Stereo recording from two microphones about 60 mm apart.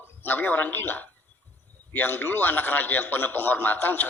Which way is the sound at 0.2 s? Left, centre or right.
Left.